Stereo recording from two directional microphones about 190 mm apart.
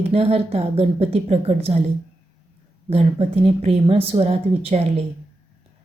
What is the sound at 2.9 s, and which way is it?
A woman's voice, 35° right (ahead or behind).